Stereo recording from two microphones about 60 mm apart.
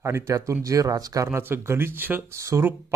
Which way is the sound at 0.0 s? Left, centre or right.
Right.